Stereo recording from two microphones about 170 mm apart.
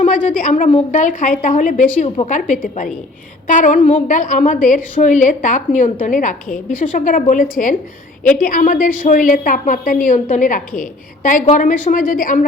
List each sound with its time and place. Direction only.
0.0 s a woman's voice: 50° left (ahead or behind)